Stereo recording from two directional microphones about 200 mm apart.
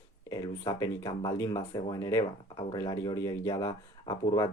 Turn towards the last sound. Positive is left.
turn(degrees=20)  # may be behind; listen again after turning